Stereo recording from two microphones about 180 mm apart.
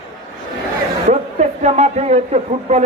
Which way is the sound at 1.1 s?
40° right (ahead or behind).